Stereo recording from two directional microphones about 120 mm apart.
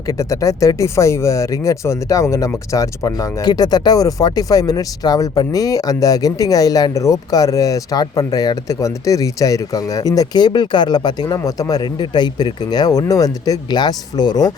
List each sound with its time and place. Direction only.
0.1 s speech: 25° left (ahead or behind)